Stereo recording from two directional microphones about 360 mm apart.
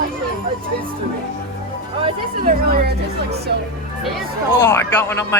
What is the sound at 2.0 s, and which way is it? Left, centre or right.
Speech, centre.